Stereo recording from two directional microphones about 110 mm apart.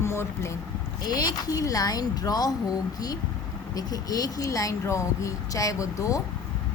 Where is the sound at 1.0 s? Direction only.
35° left (ahead or behind).